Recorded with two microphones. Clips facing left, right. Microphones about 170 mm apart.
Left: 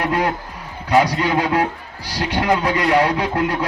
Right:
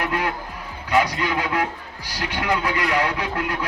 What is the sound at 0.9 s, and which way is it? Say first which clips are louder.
Speech: left 5 dB; 35° left (ahead or behind).